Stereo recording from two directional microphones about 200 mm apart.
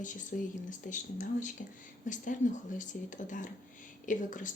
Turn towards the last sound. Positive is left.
turn(degrees=40)  # may be behind; listen again after turning